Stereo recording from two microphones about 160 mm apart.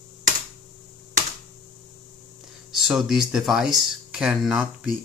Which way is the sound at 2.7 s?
Centre (ahead or behind).